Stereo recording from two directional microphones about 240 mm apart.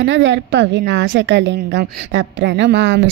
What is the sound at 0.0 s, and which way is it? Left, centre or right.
A woman's voice, right.